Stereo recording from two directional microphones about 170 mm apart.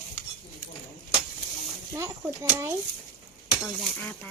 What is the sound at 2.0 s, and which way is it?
Speech, 15° right (ahead or behind).